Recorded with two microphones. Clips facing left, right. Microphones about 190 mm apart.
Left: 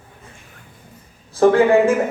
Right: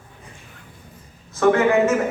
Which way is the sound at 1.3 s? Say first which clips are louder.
Left 4 dB; 30° left (ahead or behind).